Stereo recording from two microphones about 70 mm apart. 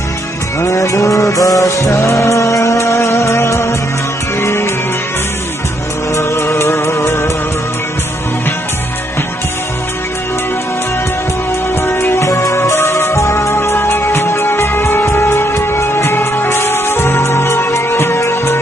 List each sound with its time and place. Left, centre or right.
0.7 s music: left
6.1 s music: left
11.8 s music: left